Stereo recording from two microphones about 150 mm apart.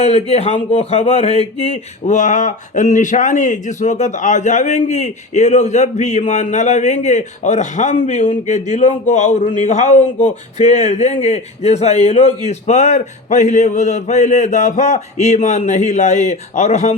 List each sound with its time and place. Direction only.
0.0 s speech: 45° left (ahead or behind)